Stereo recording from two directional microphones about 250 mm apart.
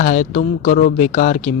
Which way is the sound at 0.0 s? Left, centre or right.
Left.